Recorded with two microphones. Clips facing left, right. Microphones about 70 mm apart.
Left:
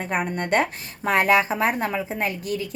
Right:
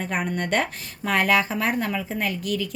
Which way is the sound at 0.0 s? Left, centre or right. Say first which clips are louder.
Left 1 dB; left.